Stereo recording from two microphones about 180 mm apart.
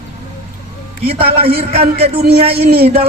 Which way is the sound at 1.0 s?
35° right (ahead or behind).